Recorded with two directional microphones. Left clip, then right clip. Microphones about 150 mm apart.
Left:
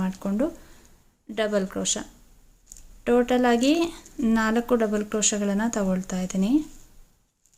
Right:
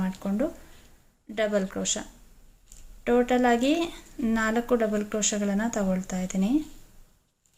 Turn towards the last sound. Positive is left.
turn(degrees=30)  # may be behind; listen again after turning